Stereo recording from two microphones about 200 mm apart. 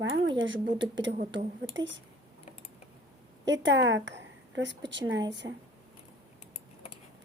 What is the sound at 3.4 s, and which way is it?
A woman's voice, 65° right (ahead or behind).